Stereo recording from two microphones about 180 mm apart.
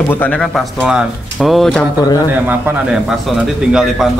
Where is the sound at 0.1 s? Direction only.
10° left (ahead or behind).